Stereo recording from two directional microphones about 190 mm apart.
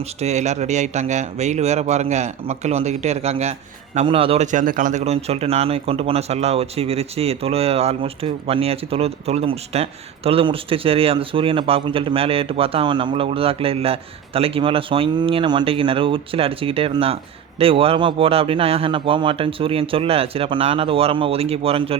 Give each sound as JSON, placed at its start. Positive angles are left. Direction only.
{"t": 0.2, "sound": "speech", "side_deg": -35}
{"t": 4.5, "sound": "speech", "side_deg": -45}